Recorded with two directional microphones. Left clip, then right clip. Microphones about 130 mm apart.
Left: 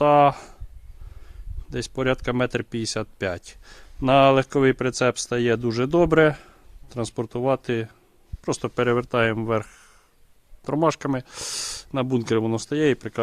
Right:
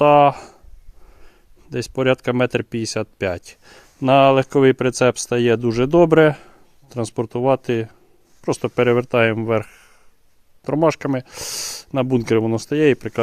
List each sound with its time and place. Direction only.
0.0 s speech: 35° right (ahead or behind)
1.7 s speech: 35° right (ahead or behind)